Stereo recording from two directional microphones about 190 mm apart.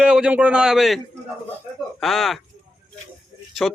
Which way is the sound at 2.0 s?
Centre (ahead or behind).